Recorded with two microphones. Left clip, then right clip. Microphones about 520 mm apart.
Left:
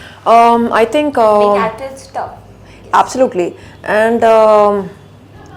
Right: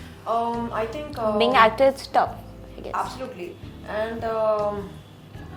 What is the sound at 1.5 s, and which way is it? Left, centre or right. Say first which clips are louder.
Speech: even; right.